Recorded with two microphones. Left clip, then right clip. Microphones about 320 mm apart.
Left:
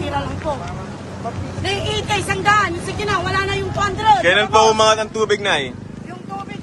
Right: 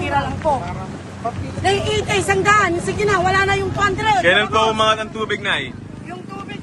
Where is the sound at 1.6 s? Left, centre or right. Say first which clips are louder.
Right 4 dB; centre.